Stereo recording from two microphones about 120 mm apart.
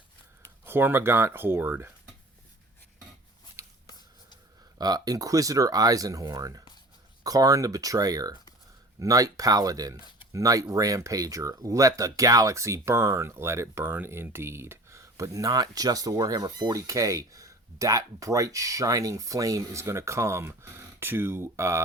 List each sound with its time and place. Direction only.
0.6 s speech: 20° right (ahead or behind)
3.6 s a sound: 25° right (ahead or behind)
4.8 s speech: 35° right (ahead or behind)